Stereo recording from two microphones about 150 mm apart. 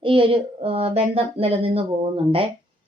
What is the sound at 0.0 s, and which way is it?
A woman's voice, 40° right (ahead or behind).